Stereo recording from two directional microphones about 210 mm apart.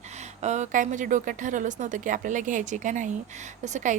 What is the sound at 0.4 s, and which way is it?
Speech, 35° right (ahead or behind).